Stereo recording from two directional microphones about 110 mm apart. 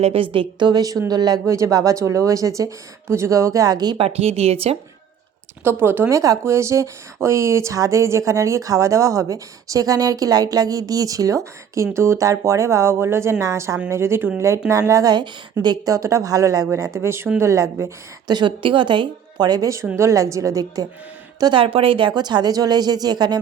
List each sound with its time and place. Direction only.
0.0 s a woman's voice: 60° right (ahead or behind)
0.7 s speech: 35° right (ahead or behind)
3.9 s speech: 65° right (ahead or behind)
5.6 s speech: 20° right (ahead or behind); by 16.0 s 40° right (ahead or behind)
16.0 s speech: 30° right (ahead or behind)
18.3 s a woman's voice: 45° right (ahead or behind)
21.6 s speech: 55° right (ahead or behind); by 23.4 s 40° right (ahead or behind)